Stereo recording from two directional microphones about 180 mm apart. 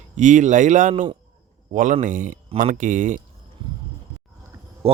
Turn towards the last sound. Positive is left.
turn(degrees=-30)  # may be behind; listen again after turning